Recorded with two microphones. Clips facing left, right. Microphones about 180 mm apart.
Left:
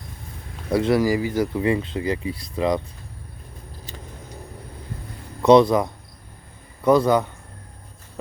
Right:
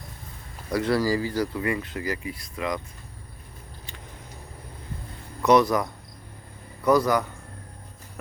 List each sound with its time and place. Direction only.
0.7 s speech: 25° left (ahead or behind)
5.4 s speech: 25° left (ahead or behind)